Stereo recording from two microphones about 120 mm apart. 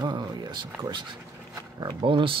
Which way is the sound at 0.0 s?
35° right (ahead or behind).